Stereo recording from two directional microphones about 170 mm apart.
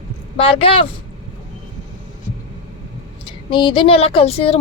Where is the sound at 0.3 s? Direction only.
30° left (ahead or behind).